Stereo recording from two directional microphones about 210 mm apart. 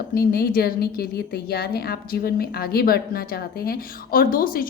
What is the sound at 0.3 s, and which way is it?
A woman's voice, 45° left (ahead or behind).